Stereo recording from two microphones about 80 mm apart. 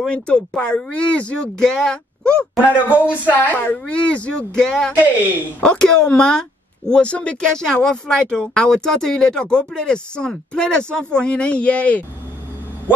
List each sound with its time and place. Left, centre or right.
0.0 s speech: centre
2.6 s speech: centre
3.0 s speech: left